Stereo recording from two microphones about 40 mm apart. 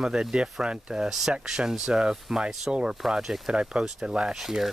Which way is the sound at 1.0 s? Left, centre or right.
Centre.